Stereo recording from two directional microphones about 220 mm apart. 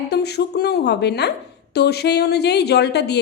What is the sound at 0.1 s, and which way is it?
A woman's voice, 45° left (ahead or behind).